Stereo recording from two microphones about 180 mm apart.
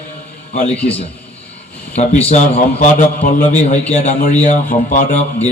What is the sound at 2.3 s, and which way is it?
A man's voice, 40° left (ahead or behind).